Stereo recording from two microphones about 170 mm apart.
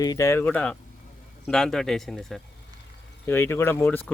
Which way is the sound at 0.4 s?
5° left (ahead or behind).